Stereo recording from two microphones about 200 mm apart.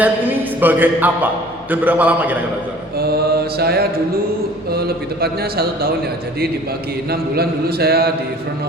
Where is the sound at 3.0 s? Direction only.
50° right (ahead or behind).